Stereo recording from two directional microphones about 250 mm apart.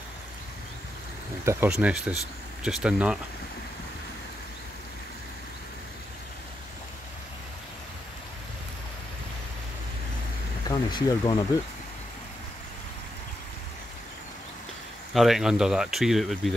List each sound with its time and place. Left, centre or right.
1.4 s speech: centre
10.7 s speech: centre
15.1 s speech: centre